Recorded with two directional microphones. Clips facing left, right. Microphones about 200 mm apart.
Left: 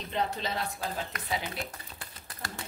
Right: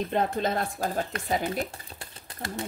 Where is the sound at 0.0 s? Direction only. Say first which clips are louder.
Right 6 dB; 50° right (ahead or behind).